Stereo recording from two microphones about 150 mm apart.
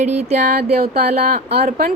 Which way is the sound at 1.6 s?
85° right.